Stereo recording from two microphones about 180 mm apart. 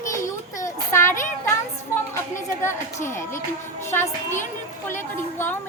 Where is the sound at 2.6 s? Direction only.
15° left (ahead or behind).